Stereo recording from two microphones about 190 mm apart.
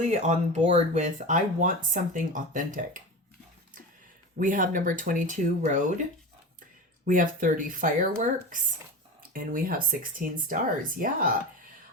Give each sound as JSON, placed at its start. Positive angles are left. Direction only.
{"t": 0.0, "sound": "speech", "side_deg": -35}
{"t": 4.4, "sound": "speech", "side_deg": -45}
{"t": 7.0, "sound": "speech", "side_deg": -45}